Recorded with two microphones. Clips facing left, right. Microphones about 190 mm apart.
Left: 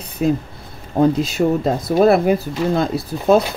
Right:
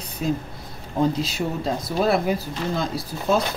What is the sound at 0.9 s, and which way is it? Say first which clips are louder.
Speech: left 7 dB; 50° left (ahead or behind).